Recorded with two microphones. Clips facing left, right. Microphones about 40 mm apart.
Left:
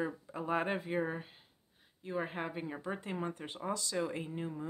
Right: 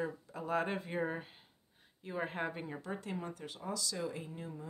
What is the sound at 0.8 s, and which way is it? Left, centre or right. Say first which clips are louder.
Speech: left 2 dB; centre.